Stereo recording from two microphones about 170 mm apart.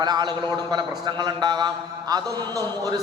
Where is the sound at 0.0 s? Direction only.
25° right (ahead or behind).